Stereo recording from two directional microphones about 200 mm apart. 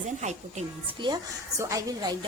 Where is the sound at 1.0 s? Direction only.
20° right (ahead or behind).